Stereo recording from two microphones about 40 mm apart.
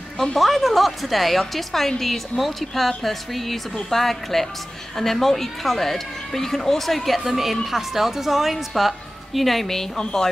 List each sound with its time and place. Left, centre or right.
0.4 s a woman's voice: centre